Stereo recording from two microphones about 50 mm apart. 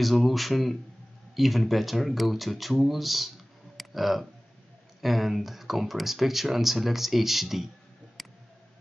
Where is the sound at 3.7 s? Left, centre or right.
Centre.